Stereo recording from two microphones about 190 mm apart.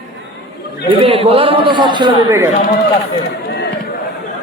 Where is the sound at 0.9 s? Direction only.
30° right (ahead or behind).